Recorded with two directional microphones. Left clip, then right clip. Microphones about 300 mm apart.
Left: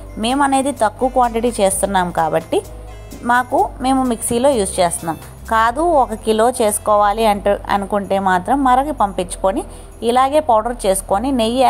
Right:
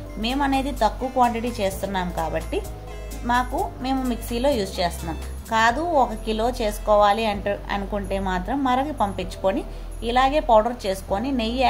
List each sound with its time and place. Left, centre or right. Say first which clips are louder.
0.2 s a woman's voice: left 8 dB; left